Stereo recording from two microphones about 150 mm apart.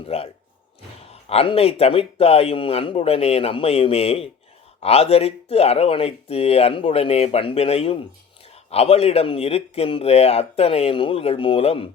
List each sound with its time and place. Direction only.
0.0 s speech: 40° left (ahead or behind)